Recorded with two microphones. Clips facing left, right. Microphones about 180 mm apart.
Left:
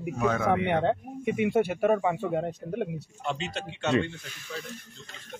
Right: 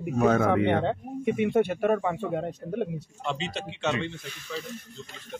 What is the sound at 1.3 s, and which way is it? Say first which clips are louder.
Speech: right 1 dB; 5° left (ahead or behind).